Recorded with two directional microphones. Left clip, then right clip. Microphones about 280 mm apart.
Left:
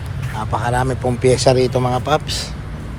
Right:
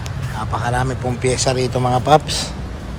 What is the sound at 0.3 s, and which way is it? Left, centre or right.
A man's voice, centre.